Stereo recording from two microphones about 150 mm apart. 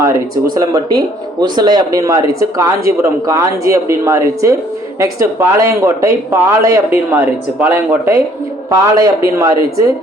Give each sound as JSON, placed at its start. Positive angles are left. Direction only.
{"t": 0.5, "sound": "speech", "side_deg": -25}